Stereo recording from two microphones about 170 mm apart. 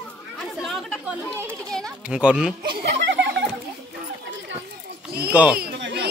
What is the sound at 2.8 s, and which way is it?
Chuckle, 75° right (ahead or behind).